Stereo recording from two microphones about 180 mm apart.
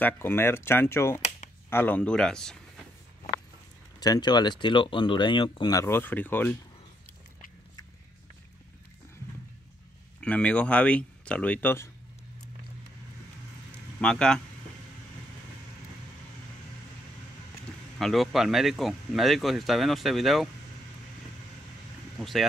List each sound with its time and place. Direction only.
0.0 s speech: 15° left (ahead or behind)
4.0 s speech: 20° left (ahead or behind)
10.2 s speech: 5° left (ahead or behind)
13.7 s a sound: 5° left (ahead or behind)
17.9 s speech: centre (ahead or behind)
22.2 s speech: centre (ahead or behind)